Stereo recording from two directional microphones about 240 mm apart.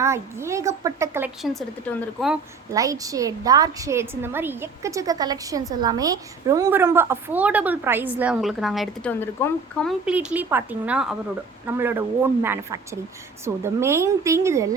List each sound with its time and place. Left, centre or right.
0.0 s a woman's voice: centre
2.7 s a woman's voice: centre
10.1 s a woman's voice: centre